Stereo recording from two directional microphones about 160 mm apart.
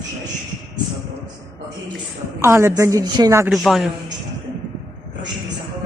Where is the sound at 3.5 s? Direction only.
Centre (ahead or behind).